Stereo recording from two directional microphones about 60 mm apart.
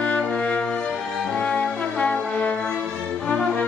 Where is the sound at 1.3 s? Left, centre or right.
Centre.